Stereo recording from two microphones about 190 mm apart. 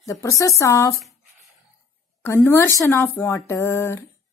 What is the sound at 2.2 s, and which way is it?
Speech, 15° left (ahead or behind).